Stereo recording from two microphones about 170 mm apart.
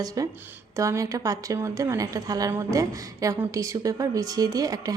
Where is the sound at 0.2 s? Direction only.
20° right (ahead or behind).